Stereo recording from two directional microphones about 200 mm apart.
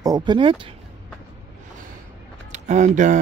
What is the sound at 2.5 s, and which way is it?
Speech, 35° right (ahead or behind).